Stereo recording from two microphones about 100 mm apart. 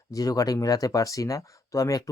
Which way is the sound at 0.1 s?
35° left (ahead or behind).